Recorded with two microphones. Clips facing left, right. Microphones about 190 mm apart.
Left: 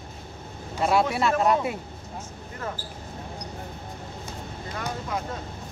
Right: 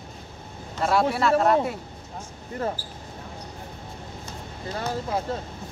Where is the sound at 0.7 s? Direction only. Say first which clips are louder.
Even; centre (ahead or behind).